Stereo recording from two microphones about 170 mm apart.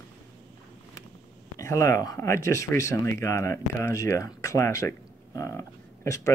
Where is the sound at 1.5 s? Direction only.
20° left (ahead or behind).